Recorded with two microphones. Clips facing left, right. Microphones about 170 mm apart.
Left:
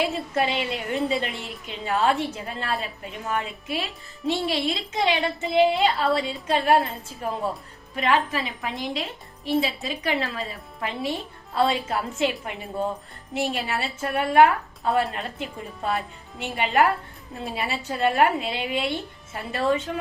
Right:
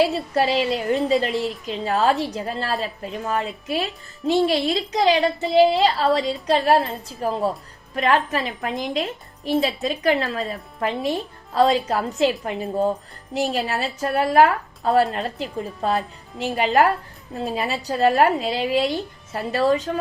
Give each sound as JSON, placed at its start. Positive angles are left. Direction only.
{"t": 0.0, "sound": "a woman's voice", "side_deg": -35}